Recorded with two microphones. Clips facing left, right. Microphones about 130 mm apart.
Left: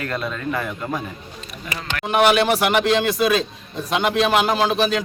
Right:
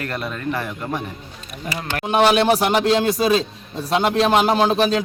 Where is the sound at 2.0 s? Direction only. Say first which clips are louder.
Right 1 dB; 25° right (ahead or behind).